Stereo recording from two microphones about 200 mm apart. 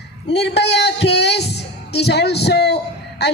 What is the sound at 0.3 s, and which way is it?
Speech, 55° left (ahead or behind).